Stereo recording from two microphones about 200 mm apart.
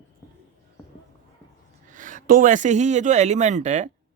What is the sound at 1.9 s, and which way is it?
Speech, 40° right (ahead or behind).